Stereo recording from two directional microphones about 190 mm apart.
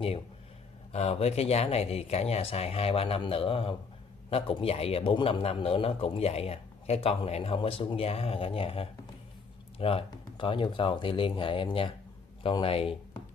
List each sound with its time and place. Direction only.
0.9 s a man's voice: 35° left (ahead or behind)